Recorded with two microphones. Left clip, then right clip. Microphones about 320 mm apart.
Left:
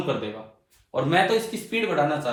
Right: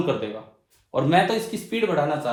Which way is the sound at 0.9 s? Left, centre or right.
Right.